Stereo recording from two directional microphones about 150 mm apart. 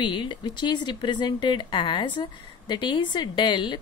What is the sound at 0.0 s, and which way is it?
Speech, 30° left (ahead or behind).